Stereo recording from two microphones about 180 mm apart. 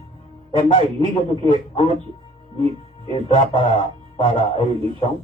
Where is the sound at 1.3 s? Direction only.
30° right (ahead or behind).